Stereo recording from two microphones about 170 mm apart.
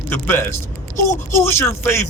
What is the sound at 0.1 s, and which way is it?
A man's voice, 15° left (ahead or behind).